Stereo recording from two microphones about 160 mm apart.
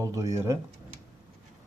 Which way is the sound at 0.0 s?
20° right (ahead or behind).